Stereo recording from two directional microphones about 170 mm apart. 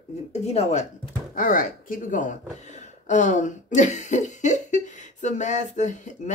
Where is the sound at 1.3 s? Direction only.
50° left (ahead or behind).